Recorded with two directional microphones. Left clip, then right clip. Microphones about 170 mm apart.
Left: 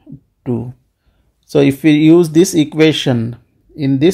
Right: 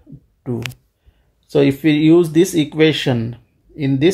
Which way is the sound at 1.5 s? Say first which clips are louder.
Left 3 dB; 50° left (ahead or behind).